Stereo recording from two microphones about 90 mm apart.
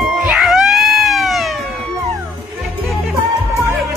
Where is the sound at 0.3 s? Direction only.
5° right (ahead or behind).